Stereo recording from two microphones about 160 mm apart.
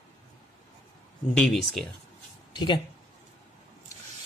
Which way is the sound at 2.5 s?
30° left (ahead or behind).